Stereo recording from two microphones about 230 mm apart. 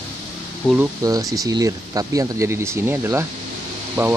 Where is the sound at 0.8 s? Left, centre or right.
Centre.